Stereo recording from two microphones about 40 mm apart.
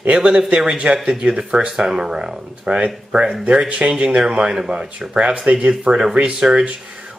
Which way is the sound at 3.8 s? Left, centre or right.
Right.